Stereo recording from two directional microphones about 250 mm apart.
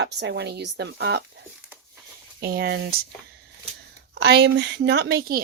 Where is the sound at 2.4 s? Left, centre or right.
Right.